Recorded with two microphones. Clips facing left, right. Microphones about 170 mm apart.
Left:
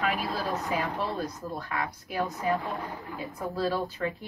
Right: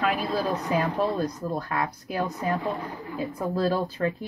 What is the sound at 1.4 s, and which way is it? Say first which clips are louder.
Speech: right 5 dB; 40° right (ahead or behind).